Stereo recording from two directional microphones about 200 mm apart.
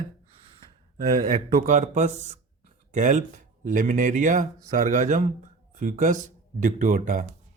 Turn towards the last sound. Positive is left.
turn(degrees=-40)  # may be behind; listen again after turning